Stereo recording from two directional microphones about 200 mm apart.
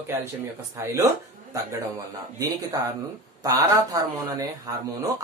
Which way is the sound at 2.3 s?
20° right (ahead or behind).